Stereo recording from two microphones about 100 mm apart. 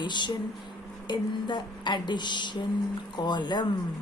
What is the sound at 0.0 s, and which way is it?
Speech, 50° left (ahead or behind).